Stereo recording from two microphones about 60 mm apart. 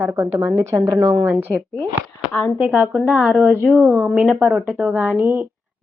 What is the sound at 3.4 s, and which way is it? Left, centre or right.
Speech, right.